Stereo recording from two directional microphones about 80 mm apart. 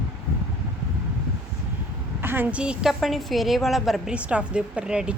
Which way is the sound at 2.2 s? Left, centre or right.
Right.